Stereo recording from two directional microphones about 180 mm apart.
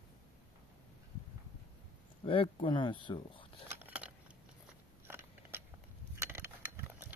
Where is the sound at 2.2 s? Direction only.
30° left (ahead or behind).